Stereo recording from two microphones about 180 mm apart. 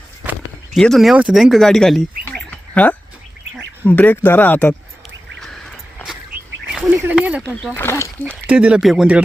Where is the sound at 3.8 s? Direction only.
10° left (ahead or behind).